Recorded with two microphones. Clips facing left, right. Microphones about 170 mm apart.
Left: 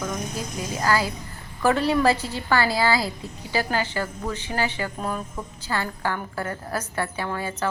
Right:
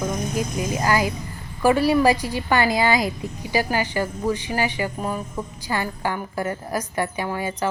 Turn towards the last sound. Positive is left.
turn(degrees=-15)  # may be behind; listen again after turning